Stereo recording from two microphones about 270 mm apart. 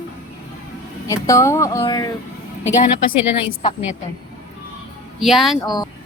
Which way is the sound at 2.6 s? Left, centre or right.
Left.